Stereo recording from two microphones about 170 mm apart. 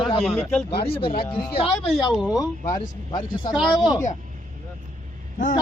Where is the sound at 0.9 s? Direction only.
30° left (ahead or behind).